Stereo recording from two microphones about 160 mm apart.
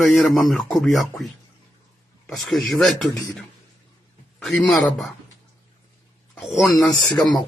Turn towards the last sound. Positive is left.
turn(degrees=25)  # may be behind; listen again after turning